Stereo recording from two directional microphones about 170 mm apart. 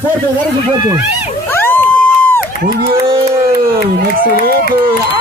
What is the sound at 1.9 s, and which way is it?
Crowd, 10° left (ahead or behind).